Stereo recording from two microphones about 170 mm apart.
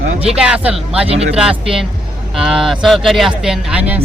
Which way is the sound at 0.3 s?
5° right (ahead or behind).